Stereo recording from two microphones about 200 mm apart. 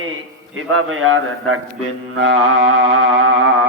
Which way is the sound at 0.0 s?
90° right.